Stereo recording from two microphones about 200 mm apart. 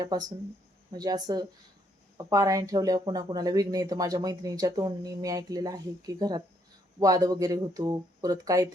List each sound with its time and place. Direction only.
0.0 s speech: 20° right (ahead or behind)